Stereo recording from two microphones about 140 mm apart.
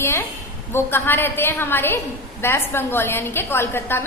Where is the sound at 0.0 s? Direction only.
20° left (ahead or behind).